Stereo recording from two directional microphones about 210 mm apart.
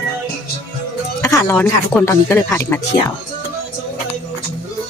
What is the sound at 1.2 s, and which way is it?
Music, 15° left (ahead or behind).